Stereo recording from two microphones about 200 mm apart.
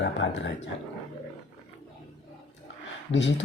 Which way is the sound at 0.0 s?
65° left (ahead or behind).